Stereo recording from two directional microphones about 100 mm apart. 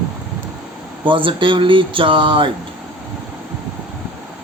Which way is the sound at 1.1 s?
55° right (ahead or behind).